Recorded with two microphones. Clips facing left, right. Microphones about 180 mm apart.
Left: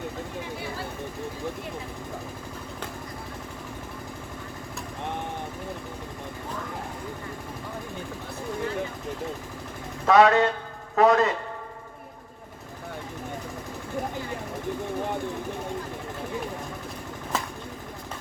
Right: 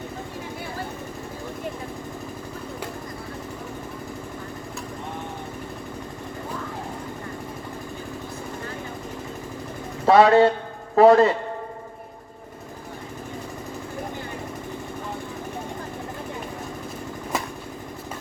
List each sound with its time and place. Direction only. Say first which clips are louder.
10.1 s speech: right 4 dB; 30° right (ahead or behind)